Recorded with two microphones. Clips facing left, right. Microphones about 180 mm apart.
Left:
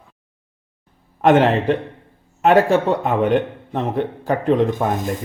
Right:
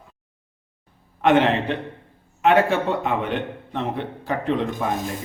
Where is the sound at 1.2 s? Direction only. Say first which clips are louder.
Left 4 dB; 45° left (ahead or behind).